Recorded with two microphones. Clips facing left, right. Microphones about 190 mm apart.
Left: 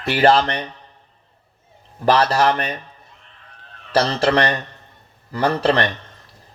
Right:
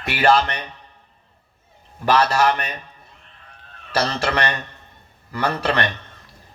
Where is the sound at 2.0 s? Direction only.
35° left (ahead or behind).